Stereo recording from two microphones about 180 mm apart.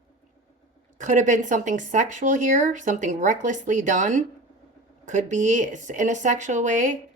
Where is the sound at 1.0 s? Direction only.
45° right (ahead or behind).